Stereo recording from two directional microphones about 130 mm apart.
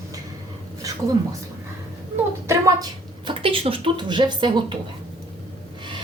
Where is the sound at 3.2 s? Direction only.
45° right (ahead or behind).